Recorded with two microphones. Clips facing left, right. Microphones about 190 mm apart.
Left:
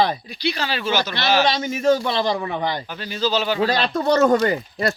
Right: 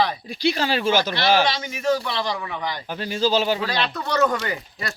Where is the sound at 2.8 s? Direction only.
45° right (ahead or behind).